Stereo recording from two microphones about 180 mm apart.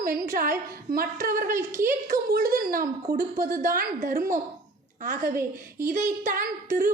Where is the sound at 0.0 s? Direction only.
50° right (ahead or behind).